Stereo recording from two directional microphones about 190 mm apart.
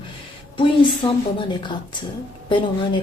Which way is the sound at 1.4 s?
25° left (ahead or behind).